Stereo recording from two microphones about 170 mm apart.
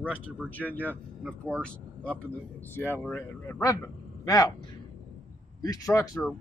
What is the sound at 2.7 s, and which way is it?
Speech, 15° left (ahead or behind).